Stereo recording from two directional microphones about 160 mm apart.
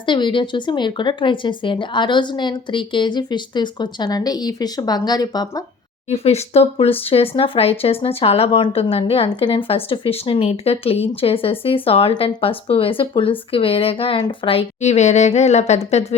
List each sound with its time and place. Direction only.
0.0 s speech: 30° left (ahead or behind)
6.1 s speech: 40° left (ahead or behind)